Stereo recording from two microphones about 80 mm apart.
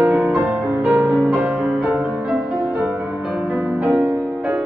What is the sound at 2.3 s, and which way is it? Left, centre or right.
Music, centre.